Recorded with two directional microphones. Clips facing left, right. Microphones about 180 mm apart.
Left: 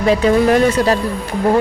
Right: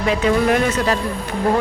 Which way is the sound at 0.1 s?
35° left (ahead or behind).